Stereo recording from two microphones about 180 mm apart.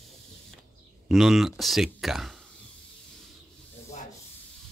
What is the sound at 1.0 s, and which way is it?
Speech, centre (ahead or behind).